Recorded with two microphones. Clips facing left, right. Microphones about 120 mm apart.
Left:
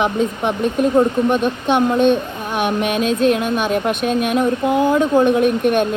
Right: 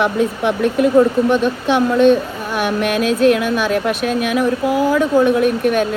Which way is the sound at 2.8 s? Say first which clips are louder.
Right 4 dB; 55° right (ahead or behind).